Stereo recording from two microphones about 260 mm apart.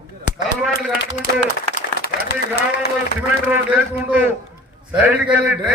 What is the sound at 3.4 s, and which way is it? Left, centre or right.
A man's voice, centre.